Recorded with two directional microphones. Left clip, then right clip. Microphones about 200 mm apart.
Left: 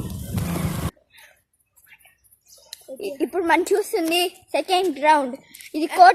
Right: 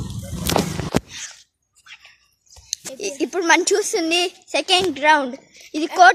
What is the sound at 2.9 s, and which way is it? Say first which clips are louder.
A woman's voice: right 1 dB; 10° right (ahead or behind).